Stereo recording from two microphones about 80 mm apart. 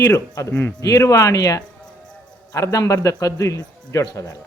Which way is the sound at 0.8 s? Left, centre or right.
Left.